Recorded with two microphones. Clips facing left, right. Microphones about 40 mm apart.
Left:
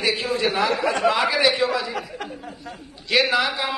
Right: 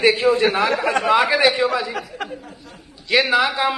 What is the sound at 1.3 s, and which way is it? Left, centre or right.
Speech, centre.